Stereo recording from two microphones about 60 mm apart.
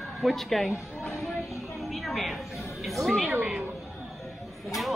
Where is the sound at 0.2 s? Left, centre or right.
Centre.